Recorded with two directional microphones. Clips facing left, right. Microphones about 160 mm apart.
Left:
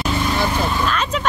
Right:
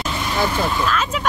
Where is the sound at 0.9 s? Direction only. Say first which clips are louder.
Even; 5° right (ahead or behind).